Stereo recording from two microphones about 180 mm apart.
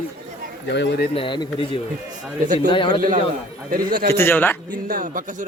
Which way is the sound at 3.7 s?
50° right (ahead or behind).